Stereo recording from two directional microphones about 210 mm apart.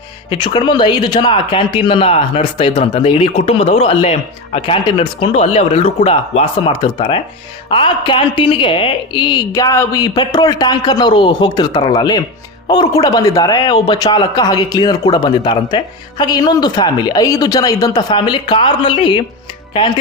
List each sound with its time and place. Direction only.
0.3 s speech: 20° left (ahead or behind)